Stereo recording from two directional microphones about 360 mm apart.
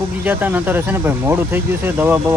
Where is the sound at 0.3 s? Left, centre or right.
Centre.